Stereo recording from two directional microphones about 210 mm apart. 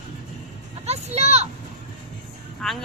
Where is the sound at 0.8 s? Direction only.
30° right (ahead or behind).